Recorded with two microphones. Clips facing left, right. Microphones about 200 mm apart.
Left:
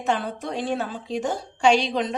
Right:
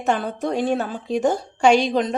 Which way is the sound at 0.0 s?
45° right (ahead or behind).